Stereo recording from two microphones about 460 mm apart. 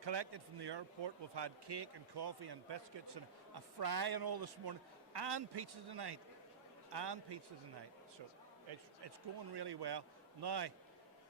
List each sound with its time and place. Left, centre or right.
0.0 s a man's voice: right
8.7 s speech: right